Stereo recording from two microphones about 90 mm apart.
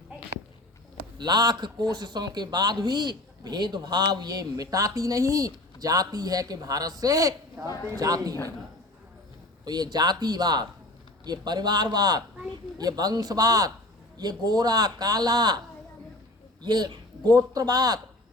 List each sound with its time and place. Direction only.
1.2 s speech: 50° right (ahead or behind)
7.6 s speech: 15° right (ahead or behind)
7.9 s a man's voice: 40° right (ahead or behind)
9.6 s speech: 50° right (ahead or behind)
16.6 s speech: 50° right (ahead or behind)